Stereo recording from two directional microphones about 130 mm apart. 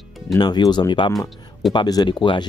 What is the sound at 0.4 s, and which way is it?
Speech, 35° left (ahead or behind).